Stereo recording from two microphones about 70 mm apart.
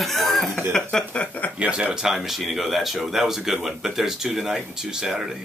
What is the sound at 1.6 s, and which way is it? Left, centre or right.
Speech, centre.